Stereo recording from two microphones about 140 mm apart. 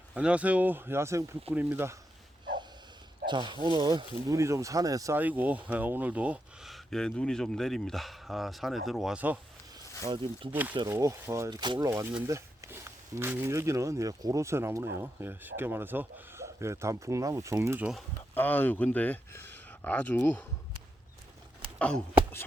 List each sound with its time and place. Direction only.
0.1 s speech: 10° right (ahead or behind)
3.2 s speech: 35° right (ahead or behind)
5.1 s speech: 10° right (ahead or behind)
10.0 s speech: 35° right (ahead or behind)
10.5 s speech: 10° right (ahead or behind); by 11.9 s 30° right (ahead or behind)
12.3 s speech: 20° right (ahead or behind)
18.3 s speech: 15° left (ahead or behind)
21.8 s a sound: 5° left (ahead or behind)